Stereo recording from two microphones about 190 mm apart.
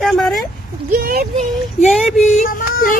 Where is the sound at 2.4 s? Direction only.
45° left (ahead or behind).